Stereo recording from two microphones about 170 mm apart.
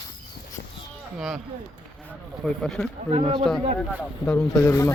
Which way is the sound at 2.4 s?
5° left (ahead or behind).